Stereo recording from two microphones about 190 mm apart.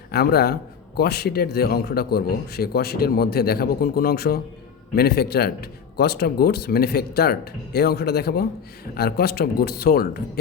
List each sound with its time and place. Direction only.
0.1 s a man's voice: 55° left (ahead or behind)